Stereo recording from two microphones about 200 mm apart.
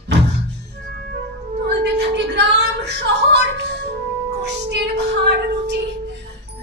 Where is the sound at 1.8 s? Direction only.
55° right (ahead or behind).